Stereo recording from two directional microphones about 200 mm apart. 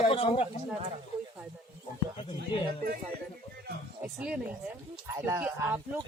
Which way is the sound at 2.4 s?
50° right (ahead or behind).